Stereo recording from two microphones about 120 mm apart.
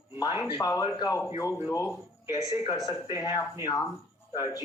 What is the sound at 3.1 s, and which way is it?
A man's voice, 30° left (ahead or behind).